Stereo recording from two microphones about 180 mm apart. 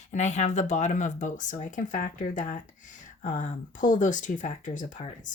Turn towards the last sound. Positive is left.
turn(degrees=45)  # may be behind; listen again after turning